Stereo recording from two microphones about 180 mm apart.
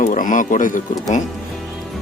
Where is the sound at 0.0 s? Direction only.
45° left (ahead or behind).